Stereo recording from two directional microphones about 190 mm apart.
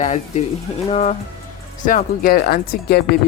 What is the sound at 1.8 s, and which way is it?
Speech, 45° left (ahead or behind).